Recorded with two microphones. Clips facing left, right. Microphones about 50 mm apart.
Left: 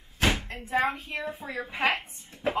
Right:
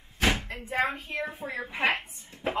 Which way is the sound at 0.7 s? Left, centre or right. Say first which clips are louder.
Left 2 dB; right.